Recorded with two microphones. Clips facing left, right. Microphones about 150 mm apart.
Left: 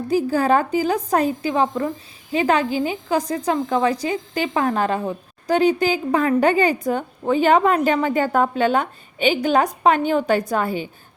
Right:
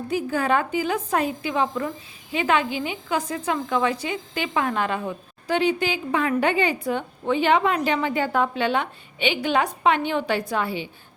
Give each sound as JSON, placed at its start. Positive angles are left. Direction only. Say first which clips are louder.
{"t": 0.1, "sound": "a woman's voice", "louder": "left 5 dB", "side_deg": 35}